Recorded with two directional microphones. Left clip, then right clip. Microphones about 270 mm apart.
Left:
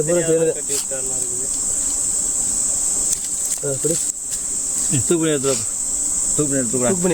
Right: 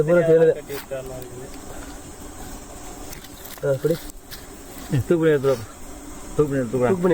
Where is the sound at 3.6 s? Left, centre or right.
Centre.